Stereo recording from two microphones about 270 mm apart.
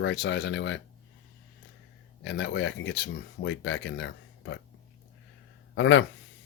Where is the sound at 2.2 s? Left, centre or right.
Left.